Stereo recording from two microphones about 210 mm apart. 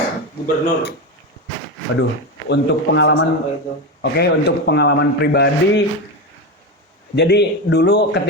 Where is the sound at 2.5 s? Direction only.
55° left (ahead or behind).